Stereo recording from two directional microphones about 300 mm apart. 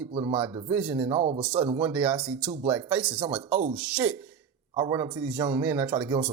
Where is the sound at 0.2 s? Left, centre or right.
Centre.